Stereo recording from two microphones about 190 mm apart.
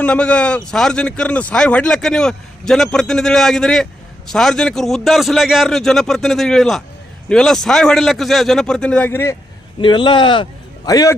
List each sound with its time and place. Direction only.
0.0 s a man's voice: 5° left (ahead or behind)
9.8 s a man's voice: 25° left (ahead or behind)